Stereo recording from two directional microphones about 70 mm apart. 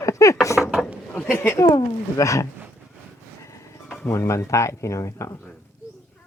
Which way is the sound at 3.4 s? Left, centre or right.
Left.